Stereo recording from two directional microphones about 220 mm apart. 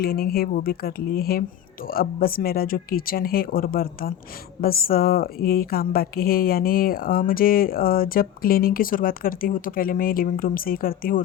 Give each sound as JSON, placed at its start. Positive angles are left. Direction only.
{"t": 0.0, "sound": "speech", "side_deg": 45}